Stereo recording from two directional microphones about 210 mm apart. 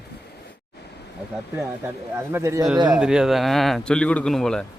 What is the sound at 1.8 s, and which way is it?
A man's voice, 10° right (ahead or behind).